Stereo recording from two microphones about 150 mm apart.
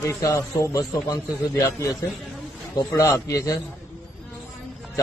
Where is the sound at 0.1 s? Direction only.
20° left (ahead or behind).